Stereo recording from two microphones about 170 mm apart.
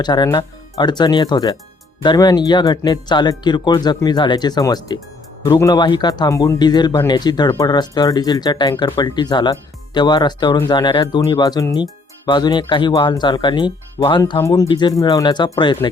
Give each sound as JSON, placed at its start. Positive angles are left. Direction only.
{"t": 0.0, "sound": "speech", "side_deg": 25}